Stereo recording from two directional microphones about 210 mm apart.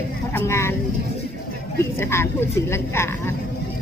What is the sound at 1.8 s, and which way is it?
Speech, 10° left (ahead or behind).